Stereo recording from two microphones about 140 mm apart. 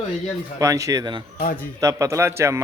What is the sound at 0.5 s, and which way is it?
A man's voice, 25° right (ahead or behind).